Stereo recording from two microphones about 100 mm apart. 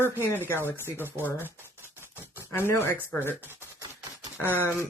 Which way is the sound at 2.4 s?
25° left (ahead or behind).